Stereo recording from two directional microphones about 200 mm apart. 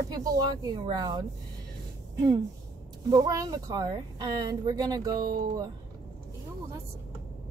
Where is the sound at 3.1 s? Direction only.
20° right (ahead or behind).